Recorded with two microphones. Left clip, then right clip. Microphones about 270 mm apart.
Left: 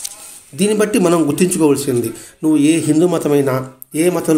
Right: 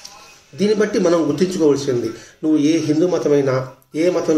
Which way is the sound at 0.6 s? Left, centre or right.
Left.